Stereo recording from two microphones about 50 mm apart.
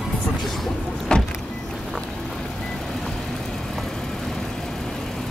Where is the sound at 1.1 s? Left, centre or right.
Centre.